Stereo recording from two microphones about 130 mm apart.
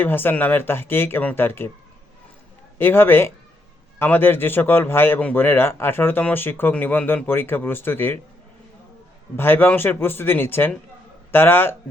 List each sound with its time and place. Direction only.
0.0 s a man's voice: 15° left (ahead or behind)
2.7 s a man's voice: 20° left (ahead or behind)
9.3 s a man's voice: 15° left (ahead or behind)